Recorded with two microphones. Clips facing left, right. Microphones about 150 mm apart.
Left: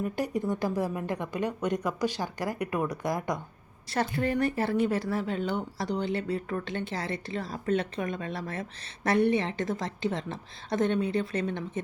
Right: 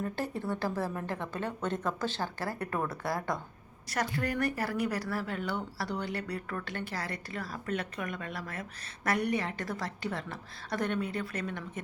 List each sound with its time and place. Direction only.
0.0 s a woman's voice: 15° left (ahead or behind)